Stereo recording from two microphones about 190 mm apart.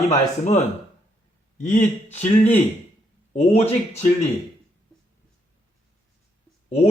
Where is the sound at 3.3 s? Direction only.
35° left (ahead or behind).